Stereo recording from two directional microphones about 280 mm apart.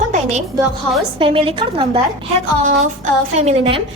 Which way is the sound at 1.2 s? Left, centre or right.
Centre.